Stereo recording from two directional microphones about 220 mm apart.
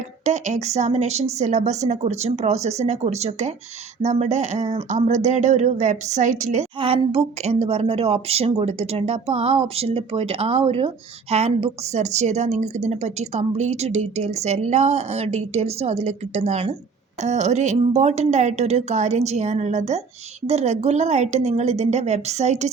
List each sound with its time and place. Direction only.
0.3 s speech: 30° right (ahead or behind)